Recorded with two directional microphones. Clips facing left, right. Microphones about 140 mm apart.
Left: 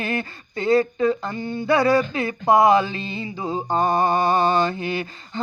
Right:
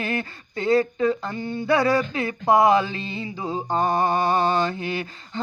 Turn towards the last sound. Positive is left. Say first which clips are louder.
# left 2 dB
turn(degrees=25)  # may be behind; listen again after turning